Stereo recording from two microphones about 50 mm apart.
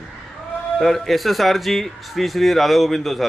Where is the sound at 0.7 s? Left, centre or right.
Centre.